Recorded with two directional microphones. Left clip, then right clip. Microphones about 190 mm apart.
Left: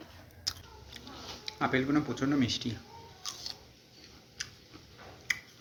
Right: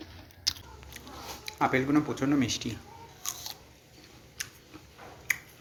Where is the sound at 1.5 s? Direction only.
15° left (ahead or behind).